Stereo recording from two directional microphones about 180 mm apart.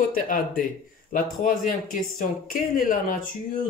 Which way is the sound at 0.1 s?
50° left (ahead or behind).